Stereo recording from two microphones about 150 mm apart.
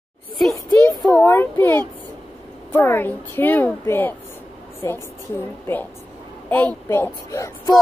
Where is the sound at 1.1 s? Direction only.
15° left (ahead or behind).